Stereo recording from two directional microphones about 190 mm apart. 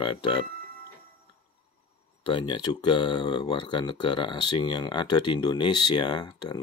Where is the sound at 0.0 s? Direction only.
25° left (ahead or behind).